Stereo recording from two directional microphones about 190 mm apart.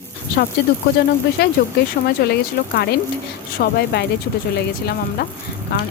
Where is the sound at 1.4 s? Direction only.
55° left (ahead or behind).